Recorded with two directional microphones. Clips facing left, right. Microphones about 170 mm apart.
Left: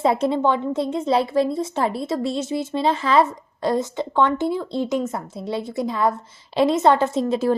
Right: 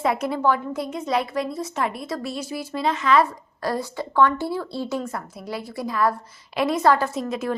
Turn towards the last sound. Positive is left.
turn(degrees=30)  # may be behind; listen again after turning